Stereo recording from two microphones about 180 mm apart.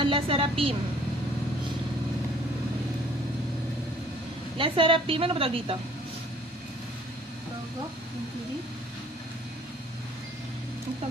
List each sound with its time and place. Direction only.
0.0 s a woman's voice: 30° right (ahead or behind)
4.5 s a woman's voice: 30° right (ahead or behind)